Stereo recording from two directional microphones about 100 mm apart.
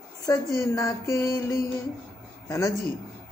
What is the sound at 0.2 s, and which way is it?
A woman's voice, 30° left (ahead or behind).